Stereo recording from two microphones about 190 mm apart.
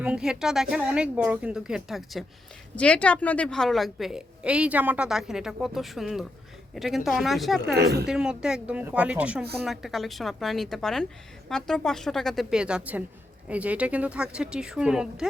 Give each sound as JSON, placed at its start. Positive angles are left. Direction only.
{"t": 0.0, "sound": "a woman's voice", "side_deg": -5}
{"t": 7.6, "sound": "speech", "side_deg": -60}
{"t": 8.0, "sound": "a woman's voice", "side_deg": -5}